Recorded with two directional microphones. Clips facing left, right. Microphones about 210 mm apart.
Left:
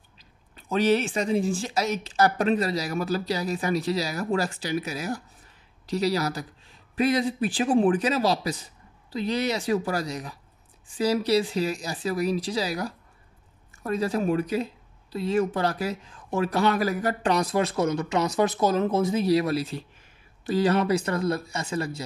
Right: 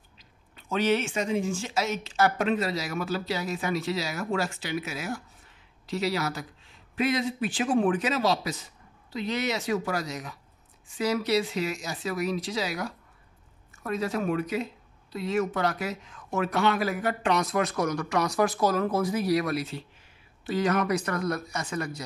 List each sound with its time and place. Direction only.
0.6 s speech: 35° left (ahead or behind)